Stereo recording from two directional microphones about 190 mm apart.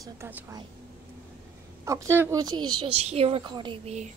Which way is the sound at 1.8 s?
15° right (ahead or behind).